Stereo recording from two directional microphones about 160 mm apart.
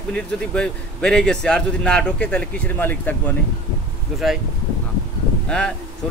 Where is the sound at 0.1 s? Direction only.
5° left (ahead or behind).